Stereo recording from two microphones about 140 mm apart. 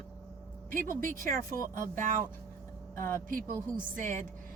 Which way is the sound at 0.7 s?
80° right.